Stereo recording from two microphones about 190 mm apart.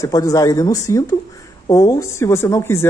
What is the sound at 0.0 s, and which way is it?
Speech, 15° left (ahead or behind).